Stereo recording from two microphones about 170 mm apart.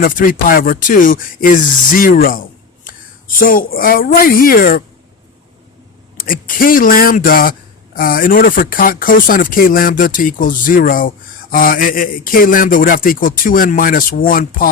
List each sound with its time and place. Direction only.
0.0 s speech: 55° left (ahead or behind)
6.1 s speech: 55° left (ahead or behind)